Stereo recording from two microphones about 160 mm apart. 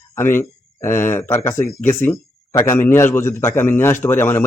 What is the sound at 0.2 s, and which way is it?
A man's voice, 15° left (ahead or behind).